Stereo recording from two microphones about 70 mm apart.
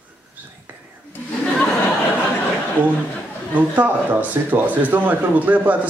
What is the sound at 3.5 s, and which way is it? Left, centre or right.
Speech, right.